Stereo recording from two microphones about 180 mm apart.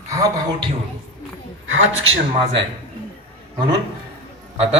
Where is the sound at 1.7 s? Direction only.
90° right.